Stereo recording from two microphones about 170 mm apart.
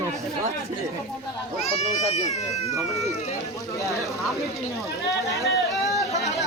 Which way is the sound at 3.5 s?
20° left (ahead or behind).